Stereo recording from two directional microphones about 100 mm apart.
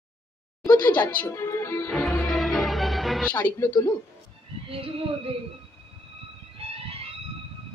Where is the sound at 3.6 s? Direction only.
35° left (ahead or behind).